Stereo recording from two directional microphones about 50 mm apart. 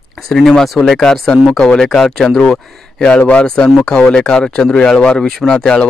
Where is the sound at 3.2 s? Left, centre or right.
Left.